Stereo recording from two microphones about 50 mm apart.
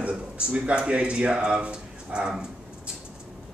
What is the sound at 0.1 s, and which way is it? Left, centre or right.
Speech, centre.